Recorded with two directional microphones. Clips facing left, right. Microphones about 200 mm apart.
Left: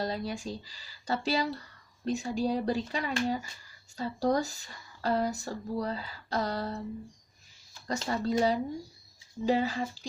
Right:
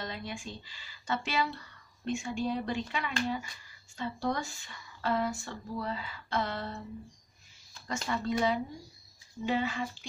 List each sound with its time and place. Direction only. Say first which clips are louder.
0.0 s speech: left 6 dB; 35° left (ahead or behind)
7.9 s speech: left 3 dB; 35° left (ahead or behind)